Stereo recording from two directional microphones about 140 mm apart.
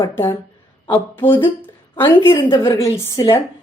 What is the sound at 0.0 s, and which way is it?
Speech, 20° left (ahead or behind).